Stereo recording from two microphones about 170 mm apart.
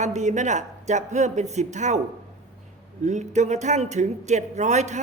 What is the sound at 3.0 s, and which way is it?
Speech, 45° right (ahead or behind).